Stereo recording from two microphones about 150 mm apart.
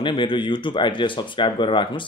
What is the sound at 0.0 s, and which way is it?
Speech, 35° left (ahead or behind).